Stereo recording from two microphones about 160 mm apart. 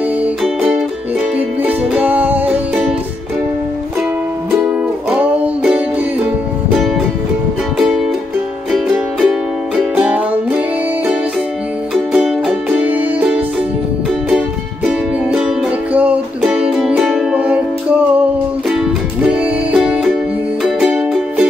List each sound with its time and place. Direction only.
0.2 s music: 5° right (ahead or behind)
5.1 s music: 5° right (ahead or behind)
8.7 s music: centre (ahead or behind)
11.9 s music: 5° right (ahead or behind)
14.9 s music: 5° right (ahead or behind)
19.2 s music: 5° right (ahead or behind)